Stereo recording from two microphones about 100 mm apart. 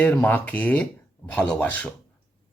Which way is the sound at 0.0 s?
15° left (ahead or behind).